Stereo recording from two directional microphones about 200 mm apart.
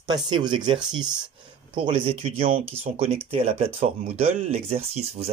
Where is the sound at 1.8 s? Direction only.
30° right (ahead or behind).